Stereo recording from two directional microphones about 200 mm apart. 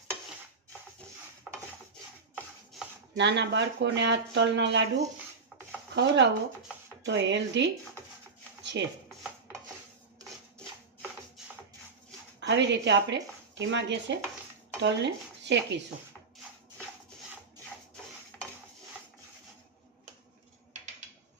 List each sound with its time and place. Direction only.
3.2 s speech: 60° right (ahead or behind)
5.9 s speech: 60° right (ahead or behind)
8.8 s speech: 60° right (ahead or behind)
11.4 s music: centre (ahead or behind)
12.4 s a woman's voice: 60° right (ahead or behind)